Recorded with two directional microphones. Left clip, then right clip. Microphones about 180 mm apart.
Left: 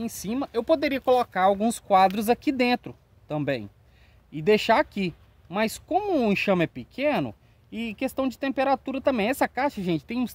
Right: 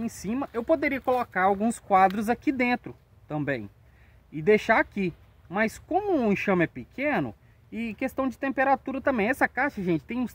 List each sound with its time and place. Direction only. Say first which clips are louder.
0.2 s speech: left 3 dB; 45° left (ahead or behind)
6.5 s speech: left 1 dB; 55° left (ahead or behind)